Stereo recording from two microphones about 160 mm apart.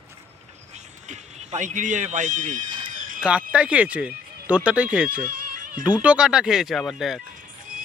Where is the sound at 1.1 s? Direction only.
45° right (ahead or behind).